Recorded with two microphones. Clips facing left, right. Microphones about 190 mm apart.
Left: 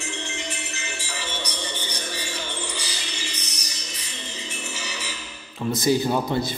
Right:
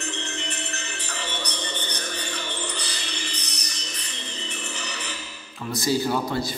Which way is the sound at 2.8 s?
10° left (ahead or behind).